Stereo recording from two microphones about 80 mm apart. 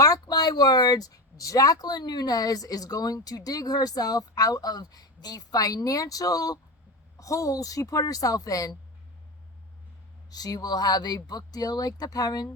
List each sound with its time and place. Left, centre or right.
0.0 s speech: left
10.2 s speech: left